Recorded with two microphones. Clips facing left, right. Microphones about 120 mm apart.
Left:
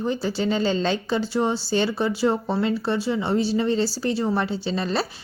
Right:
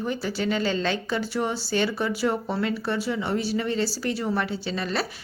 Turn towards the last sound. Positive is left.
turn(degrees=30)  # may be behind; listen again after turning